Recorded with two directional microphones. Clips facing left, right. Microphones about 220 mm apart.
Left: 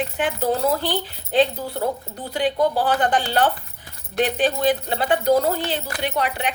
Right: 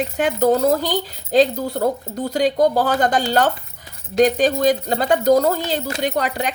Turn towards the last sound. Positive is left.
turn(degrees=-40)  # may be behind; listen again after turning